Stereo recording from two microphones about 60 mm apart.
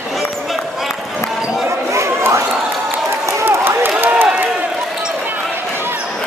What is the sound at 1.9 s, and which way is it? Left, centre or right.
Chatter, right.